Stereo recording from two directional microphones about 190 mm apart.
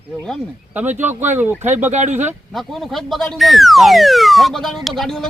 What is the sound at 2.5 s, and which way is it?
Speech, centre (ahead or behind).